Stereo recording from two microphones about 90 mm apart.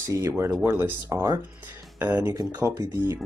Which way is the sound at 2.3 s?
40° right (ahead or behind).